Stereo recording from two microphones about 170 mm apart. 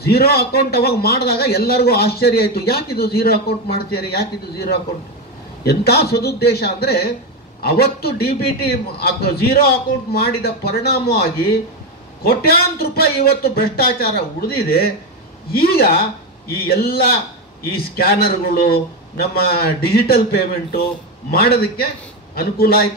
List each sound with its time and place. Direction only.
0.0 s a man's voice: 65° left (ahead or behind)
5.7 s a man's voice: 70° left (ahead or behind)
12.2 s a man's voice: 65° left (ahead or behind)